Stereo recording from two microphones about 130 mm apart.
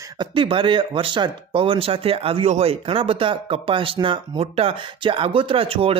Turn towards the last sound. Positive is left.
turn(degrees=-45)  # may be behind; listen again after turning